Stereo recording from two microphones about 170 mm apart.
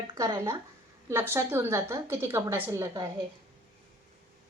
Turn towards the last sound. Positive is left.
turn(degrees=-20)  # may be behind; listen again after turning